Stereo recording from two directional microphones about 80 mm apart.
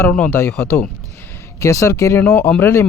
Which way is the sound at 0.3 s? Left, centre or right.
Left.